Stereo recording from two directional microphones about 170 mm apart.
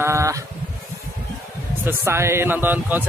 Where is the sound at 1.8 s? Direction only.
15° right (ahead or behind).